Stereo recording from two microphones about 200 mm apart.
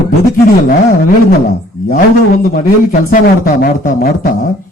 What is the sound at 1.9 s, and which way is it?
Speech, 50° left (ahead or behind).